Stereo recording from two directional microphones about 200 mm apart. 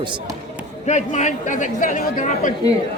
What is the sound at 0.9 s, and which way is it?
Speech, 35° left (ahead or behind).